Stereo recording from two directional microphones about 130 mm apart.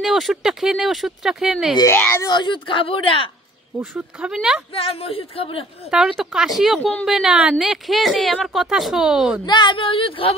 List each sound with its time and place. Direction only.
0.0 s a woman's voice: centre (ahead or behind)
1.8 s speech: 20° left (ahead or behind)
2.2 s speech: 35° left (ahead or behind)
3.9 s a woman's voice: 5° right (ahead or behind)
4.7 s a man's voice: 45° left (ahead or behind)
5.9 s a woman's voice: 5° right (ahead or behind)
9.5 s a man's voice: 35° left (ahead or behind)